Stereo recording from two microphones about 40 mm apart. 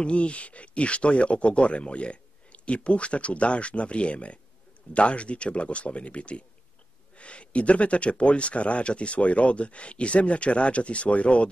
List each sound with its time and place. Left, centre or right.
0.0 s speech: left